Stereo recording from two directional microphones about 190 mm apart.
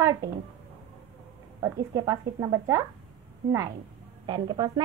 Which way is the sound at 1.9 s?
15° right (ahead or behind).